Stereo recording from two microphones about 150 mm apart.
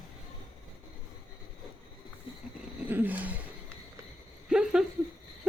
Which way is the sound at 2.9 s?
10° right (ahead or behind).